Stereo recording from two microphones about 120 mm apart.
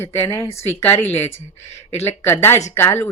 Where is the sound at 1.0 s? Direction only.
65° left (ahead or behind).